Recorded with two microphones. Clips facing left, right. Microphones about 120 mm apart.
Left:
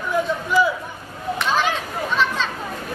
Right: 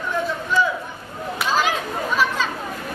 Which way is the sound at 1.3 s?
10° right (ahead or behind).